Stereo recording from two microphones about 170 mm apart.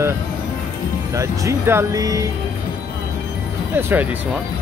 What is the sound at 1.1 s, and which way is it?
Speech, 20° right (ahead or behind).